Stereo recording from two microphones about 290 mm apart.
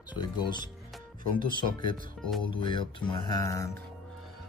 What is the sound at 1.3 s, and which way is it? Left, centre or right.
Music, centre.